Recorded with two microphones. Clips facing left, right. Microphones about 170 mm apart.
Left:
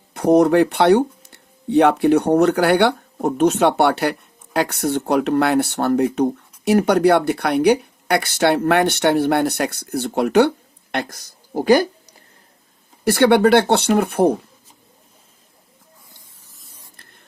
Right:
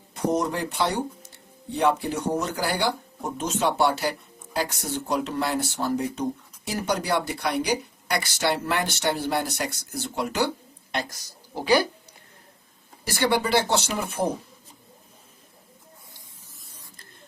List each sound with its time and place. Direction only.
0.1 s speech: 65° left (ahead or behind); by 12.1 s 50° left (ahead or behind)
13.1 s speech: 65° left (ahead or behind)